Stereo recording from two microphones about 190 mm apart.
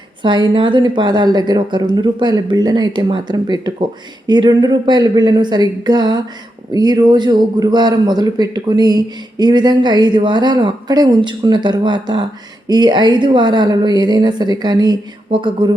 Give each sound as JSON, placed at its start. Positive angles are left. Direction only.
{"t": 0.2, "sound": "a man's voice", "side_deg": -25}